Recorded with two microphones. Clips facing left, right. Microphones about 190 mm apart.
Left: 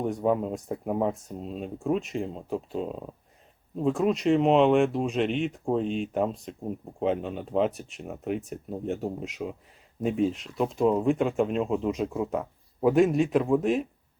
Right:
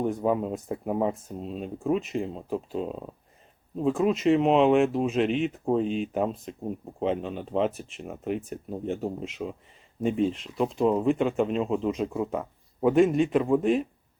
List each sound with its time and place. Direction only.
0.0 s speech: centre (ahead or behind)